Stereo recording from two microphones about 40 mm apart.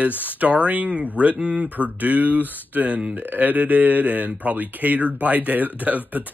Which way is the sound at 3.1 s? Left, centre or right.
Right.